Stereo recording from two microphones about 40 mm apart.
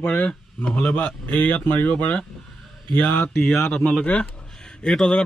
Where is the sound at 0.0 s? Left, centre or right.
Left.